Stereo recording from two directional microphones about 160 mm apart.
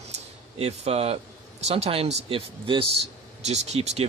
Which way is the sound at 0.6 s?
40° right (ahead or behind).